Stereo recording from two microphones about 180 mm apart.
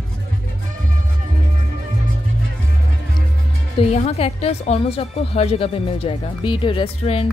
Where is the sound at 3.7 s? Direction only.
35° left (ahead or behind).